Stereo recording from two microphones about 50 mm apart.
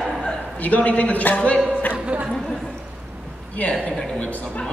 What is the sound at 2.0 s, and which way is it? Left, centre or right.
Chatter, right.